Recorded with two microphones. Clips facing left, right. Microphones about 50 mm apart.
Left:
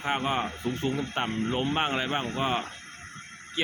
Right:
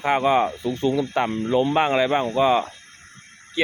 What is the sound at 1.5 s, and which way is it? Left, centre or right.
Speech, right.